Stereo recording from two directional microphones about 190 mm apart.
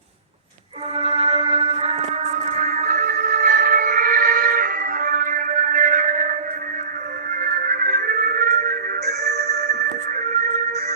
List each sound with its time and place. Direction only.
0.9 s music: 35° right (ahead or behind)
7.3 s music: 45° right (ahead or behind)